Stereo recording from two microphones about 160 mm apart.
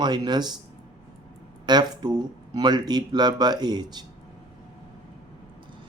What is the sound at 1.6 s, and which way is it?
Speech, 25° right (ahead or behind).